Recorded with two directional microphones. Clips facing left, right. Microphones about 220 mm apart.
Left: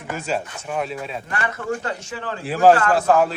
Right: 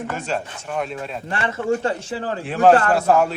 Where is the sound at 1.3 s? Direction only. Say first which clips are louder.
Right 5 dB; 25° right (ahead or behind).